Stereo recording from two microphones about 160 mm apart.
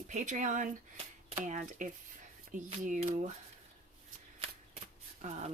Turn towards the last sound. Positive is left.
turn(degrees=-50)  # may be behind; listen again after turning